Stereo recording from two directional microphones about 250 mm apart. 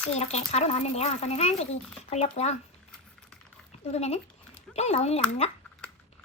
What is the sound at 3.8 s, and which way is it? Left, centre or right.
Speech, left.